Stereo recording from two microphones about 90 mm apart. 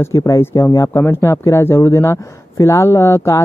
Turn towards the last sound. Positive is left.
turn(degrees=30)  # may be behind; listen again after turning